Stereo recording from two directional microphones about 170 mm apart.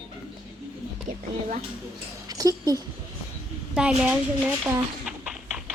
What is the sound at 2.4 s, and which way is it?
Speech, 20° right (ahead or behind).